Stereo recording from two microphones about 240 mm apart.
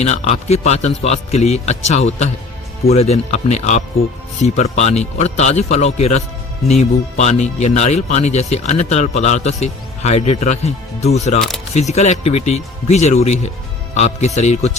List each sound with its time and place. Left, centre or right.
0.0 s speech: left